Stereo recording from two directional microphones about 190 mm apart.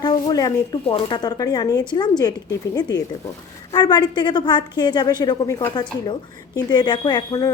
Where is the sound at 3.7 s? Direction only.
20° left (ahead or behind).